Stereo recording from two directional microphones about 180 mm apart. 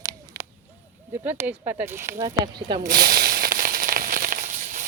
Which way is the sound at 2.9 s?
55° right (ahead or behind).